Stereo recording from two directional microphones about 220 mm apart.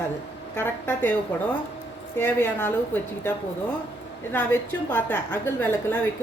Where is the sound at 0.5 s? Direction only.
10° left (ahead or behind).